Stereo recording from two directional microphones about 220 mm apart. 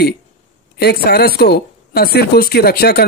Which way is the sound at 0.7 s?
45° left (ahead or behind).